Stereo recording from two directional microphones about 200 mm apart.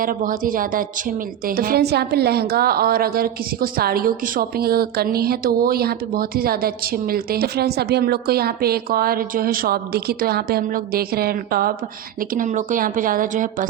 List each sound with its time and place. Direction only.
0.0 s a woman's voice: 45° right (ahead or behind)